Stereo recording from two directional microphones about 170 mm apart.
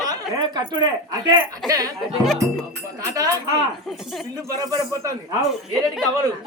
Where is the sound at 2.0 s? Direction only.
Centre (ahead or behind).